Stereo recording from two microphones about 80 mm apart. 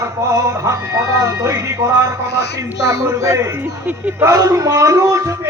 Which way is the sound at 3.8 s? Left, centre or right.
Right.